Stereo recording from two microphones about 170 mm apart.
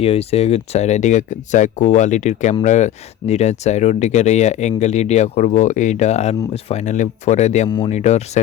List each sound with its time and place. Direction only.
0.0 s speech: 35° left (ahead or behind)